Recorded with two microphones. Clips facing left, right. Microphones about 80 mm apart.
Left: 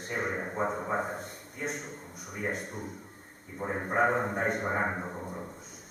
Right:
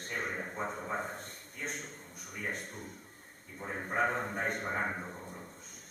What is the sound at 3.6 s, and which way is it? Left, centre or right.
A man's voice, centre.